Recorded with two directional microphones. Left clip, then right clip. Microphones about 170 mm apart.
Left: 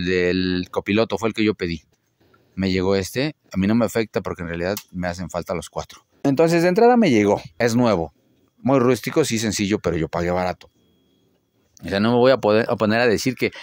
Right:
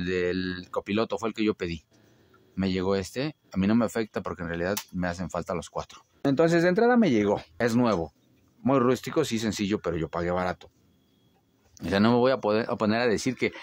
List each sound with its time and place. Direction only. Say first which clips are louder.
0.0 s speech: left 8 dB; 30° left (ahead or behind)
11.8 s speech: left 3 dB; 15° left (ahead or behind)
12.2 s speech: left 8 dB; 35° left (ahead or behind)